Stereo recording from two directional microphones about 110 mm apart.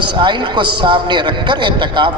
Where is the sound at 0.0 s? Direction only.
45° right (ahead or behind).